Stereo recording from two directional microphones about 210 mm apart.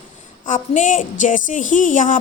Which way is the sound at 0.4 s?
35° left (ahead or behind).